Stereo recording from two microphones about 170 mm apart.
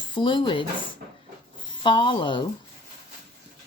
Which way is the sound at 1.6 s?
30° left (ahead or behind).